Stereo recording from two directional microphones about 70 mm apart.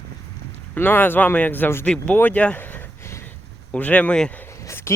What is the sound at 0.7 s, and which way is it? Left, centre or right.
Speech, left.